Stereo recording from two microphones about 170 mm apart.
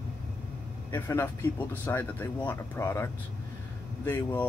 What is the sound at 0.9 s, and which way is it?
Speech, 15° left (ahead or behind).